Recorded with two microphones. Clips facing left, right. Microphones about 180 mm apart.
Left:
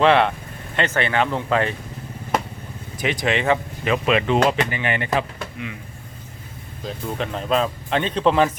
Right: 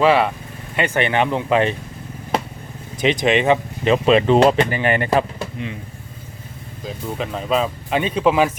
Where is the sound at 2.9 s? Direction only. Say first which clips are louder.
Right 5 dB; 20° right (ahead or behind); by 5.2 s 45° right (ahead or behind).